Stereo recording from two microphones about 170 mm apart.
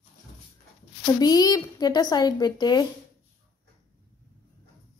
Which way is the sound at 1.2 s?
20° left (ahead or behind).